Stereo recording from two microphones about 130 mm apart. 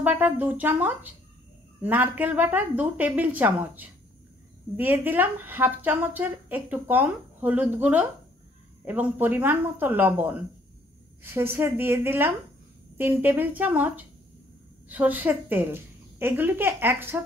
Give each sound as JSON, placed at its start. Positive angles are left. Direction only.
{"t": 0.0, "sound": "a woman's voice", "side_deg": -10}